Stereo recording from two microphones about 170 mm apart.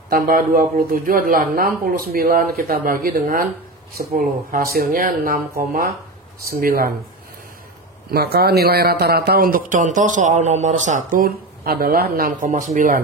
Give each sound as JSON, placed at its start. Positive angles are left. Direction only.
{"t": 0.1, "sound": "a man's voice", "side_deg": -55}
{"t": 8.1, "sound": "a man's voice", "side_deg": -65}